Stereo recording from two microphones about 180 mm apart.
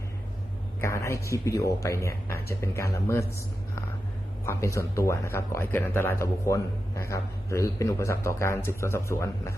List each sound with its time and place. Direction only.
0.8 s speech: 15° left (ahead or behind)
4.4 s speech: 15° left (ahead or behind)